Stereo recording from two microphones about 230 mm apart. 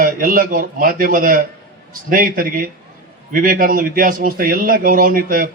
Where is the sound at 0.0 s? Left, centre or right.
Right.